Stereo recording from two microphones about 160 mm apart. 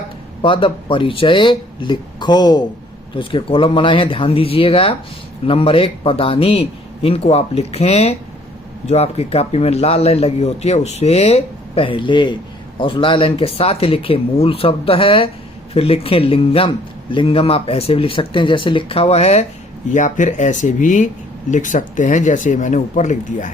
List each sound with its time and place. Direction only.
0.4 s a man's voice: 35° left (ahead or behind); by 23.5 s 50° left (ahead or behind)